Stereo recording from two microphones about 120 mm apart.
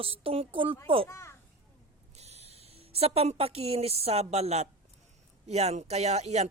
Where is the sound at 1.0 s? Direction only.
25° left (ahead or behind).